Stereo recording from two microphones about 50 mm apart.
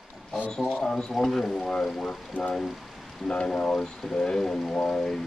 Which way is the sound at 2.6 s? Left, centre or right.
Centre.